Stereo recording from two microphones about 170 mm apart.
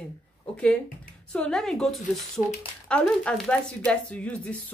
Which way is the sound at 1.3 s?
5° left (ahead or behind).